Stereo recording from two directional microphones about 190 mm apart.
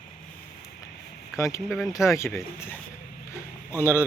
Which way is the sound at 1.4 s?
15° left (ahead or behind).